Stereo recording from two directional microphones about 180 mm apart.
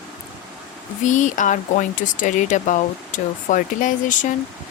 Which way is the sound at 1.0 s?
45° left (ahead or behind).